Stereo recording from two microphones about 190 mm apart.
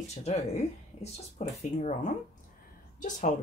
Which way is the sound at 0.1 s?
35° left (ahead or behind).